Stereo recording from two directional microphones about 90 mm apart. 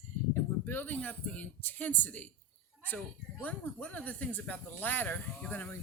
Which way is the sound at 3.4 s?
15° left (ahead or behind).